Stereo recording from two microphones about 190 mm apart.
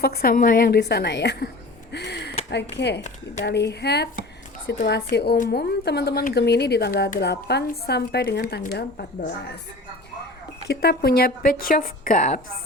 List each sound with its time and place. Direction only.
0.0 s speech: 55° left (ahead or behind)
1.9 s a sound: 60° left (ahead or behind)
2.5 s speech: 65° left (ahead or behind)
10.7 s a woman's voice: 55° left (ahead or behind)